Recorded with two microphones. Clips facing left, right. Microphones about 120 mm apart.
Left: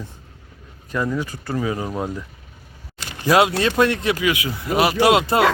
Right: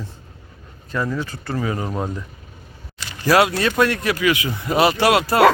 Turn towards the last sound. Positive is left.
turn(degrees=20)  # may be behind; listen again after turning